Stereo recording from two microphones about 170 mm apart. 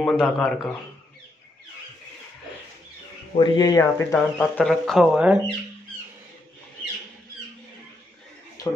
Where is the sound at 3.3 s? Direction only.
25° left (ahead or behind).